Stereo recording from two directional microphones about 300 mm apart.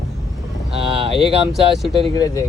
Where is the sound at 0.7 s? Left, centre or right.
Centre.